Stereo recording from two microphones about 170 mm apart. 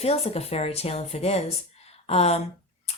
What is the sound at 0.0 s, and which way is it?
Speech, 35° left (ahead or behind).